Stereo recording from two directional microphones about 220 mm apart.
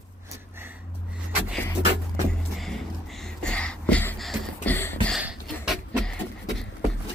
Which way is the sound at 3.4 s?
5° left (ahead or behind).